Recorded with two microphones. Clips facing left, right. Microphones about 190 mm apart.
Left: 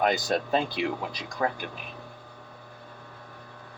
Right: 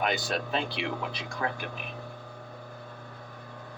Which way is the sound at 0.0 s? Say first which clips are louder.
Left 4 dB; 40° left (ahead or behind).